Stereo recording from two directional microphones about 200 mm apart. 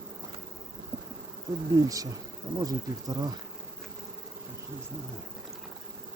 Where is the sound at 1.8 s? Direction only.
15° right (ahead or behind).